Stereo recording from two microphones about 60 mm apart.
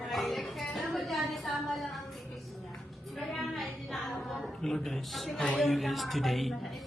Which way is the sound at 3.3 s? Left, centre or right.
Centre.